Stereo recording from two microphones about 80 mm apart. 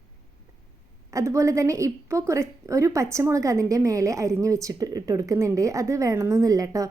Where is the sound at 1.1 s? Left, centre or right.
Right.